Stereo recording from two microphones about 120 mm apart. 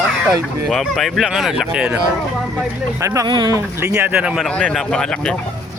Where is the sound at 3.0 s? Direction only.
25° right (ahead or behind).